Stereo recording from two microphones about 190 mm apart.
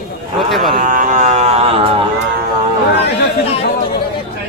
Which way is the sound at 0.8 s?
45° right (ahead or behind).